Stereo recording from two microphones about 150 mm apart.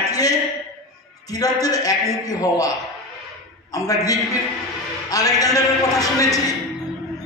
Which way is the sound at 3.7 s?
25° left (ahead or behind).